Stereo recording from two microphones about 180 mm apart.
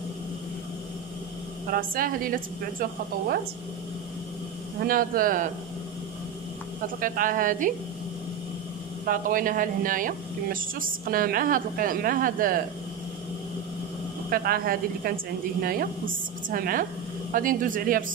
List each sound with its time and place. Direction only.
1.7 s speech: 50° right (ahead or behind)
4.7 s speech: 50° right (ahead or behind)
7.0 s speech: 50° right (ahead or behind)
9.0 s speech: 50° right (ahead or behind)
14.3 s a woman's voice: 55° right (ahead or behind)